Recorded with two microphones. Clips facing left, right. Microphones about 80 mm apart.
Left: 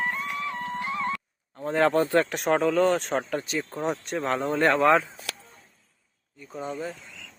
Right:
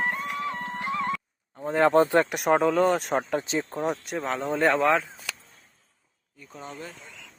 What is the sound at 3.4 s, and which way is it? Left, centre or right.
Speech, right.